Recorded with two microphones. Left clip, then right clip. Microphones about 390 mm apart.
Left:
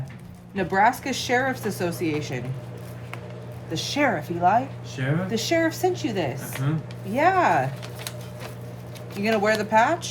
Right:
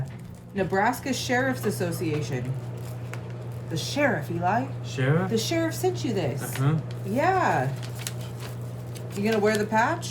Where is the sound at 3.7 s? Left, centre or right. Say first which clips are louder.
Left 2 dB; left.